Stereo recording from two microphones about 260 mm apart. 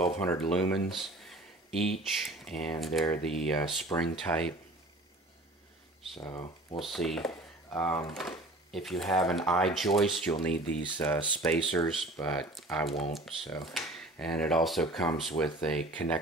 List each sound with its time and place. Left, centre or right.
0.2 s speech: centre
6.2 s speech: centre
6.8 s speech: centre